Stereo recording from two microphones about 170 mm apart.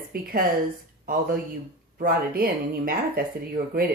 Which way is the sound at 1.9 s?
60° right (ahead or behind).